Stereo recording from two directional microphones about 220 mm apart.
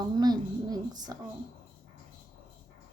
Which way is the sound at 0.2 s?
20° right (ahead or behind).